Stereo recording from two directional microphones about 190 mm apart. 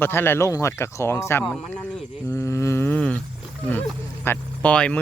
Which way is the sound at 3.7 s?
10° left (ahead or behind).